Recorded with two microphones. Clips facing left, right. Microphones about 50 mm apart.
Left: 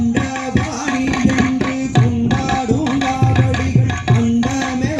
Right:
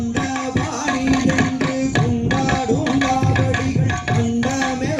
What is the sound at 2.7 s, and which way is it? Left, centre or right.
Tabla, right.